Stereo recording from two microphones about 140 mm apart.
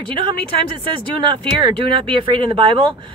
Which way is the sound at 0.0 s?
35° right (ahead or behind).